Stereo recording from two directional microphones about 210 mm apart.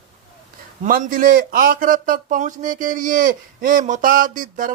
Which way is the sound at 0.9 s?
40° right (ahead or behind).